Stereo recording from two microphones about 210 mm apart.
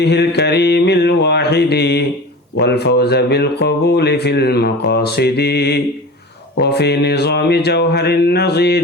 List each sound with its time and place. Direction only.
0.0 s speech: 50° left (ahead or behind)